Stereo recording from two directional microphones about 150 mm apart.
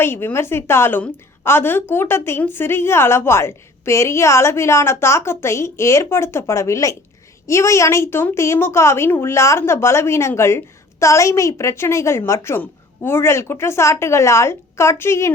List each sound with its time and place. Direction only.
0.0 s a woman's voice: 15° left (ahead or behind)